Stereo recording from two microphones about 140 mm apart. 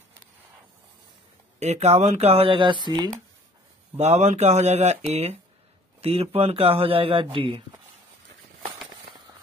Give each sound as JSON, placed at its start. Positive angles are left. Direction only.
{"t": 1.6, "sound": "speech", "side_deg": -50}
{"t": 3.9, "sound": "speech", "side_deg": -50}